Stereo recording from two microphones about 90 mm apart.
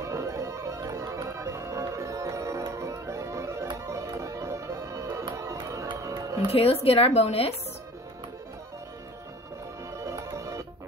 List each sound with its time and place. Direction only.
0.0 s music: 35° right (ahead or behind)
6.5 s speech: 90° left
10.0 s music: 35° right (ahead or behind)